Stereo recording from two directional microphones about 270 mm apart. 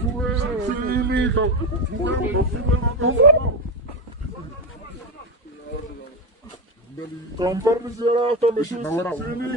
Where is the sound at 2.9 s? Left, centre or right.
Right.